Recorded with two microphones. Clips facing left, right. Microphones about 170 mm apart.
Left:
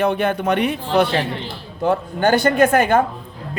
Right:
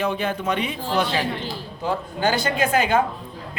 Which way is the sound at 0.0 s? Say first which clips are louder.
Left 5 dB; 60° left (ahead or behind).